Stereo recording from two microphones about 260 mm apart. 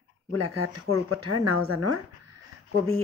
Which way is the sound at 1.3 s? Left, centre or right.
Right.